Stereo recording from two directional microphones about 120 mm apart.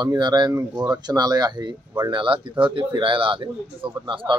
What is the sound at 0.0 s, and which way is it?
Speech, 35° right (ahead or behind).